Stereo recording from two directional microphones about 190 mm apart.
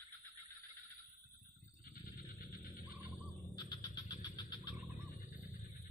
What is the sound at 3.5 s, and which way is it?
Vehicle, 25° left (ahead or behind).